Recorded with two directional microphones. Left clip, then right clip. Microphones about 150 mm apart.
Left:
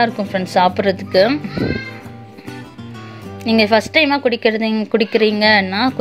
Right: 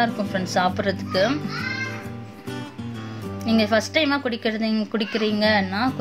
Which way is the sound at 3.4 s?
45° left (ahead or behind).